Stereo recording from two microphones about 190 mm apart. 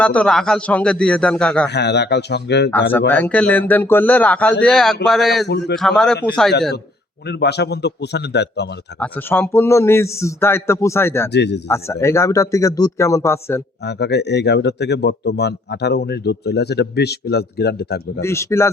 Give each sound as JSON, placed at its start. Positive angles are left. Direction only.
{"t": 0.0, "sound": "a man's voice", "side_deg": 5}
{"t": 1.7, "sound": "speech", "side_deg": 60}
{"t": 3.1, "sound": "a man's voice", "side_deg": 10}
{"t": 7.3, "sound": "speech", "side_deg": 60}
{"t": 9.0, "sound": "a man's voice", "side_deg": 10}
{"t": 11.3, "sound": "speech", "side_deg": 65}
{"t": 11.7, "sound": "a man's voice", "side_deg": 15}
{"t": 13.8, "sound": "speech", "side_deg": 60}
{"t": 18.2, "sound": "a man's voice", "side_deg": 15}